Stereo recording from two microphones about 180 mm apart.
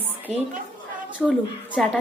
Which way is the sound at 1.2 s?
5° left (ahead or behind).